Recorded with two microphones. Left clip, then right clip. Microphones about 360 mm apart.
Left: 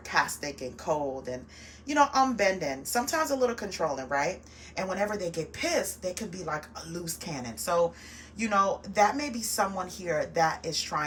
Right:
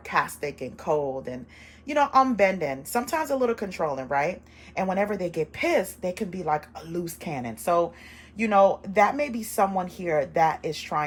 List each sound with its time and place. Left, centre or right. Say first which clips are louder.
0.1 s a woman's voice: right 2 dB; centre